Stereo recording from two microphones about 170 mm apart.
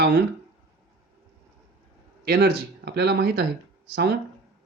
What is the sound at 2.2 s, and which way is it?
Speech, 70° right (ahead or behind).